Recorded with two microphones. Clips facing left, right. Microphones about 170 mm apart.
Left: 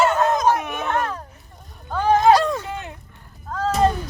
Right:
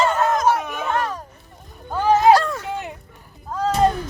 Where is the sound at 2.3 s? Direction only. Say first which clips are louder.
Even; 20° left (ahead or behind).